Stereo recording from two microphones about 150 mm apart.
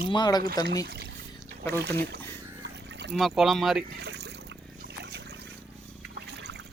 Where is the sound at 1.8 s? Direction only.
90° right.